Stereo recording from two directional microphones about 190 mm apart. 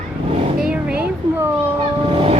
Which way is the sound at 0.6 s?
5° right (ahead or behind).